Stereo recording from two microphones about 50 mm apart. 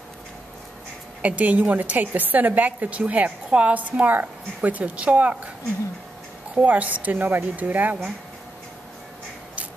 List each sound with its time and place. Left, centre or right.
1.2 s a woman's voice: right
6.5 s a woman's voice: right